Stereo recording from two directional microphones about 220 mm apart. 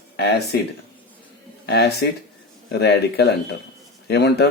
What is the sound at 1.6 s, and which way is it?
Speech, 50° left (ahead or behind).